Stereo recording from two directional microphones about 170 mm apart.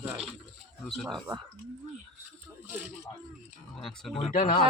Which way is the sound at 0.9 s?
Centre (ahead or behind).